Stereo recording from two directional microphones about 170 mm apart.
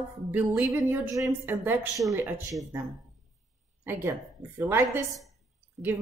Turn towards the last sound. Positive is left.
turn(degrees=0)  # may be behind; listen again after turning